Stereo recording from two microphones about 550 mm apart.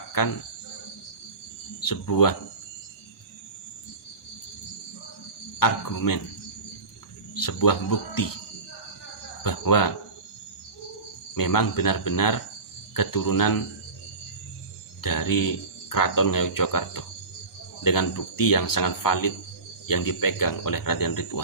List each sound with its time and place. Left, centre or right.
0.2 s speech: left
1.8 s speech: left
5.6 s speech: left
7.3 s speech: left
9.4 s a sound: left
11.3 s speech: left
15.0 s speech: left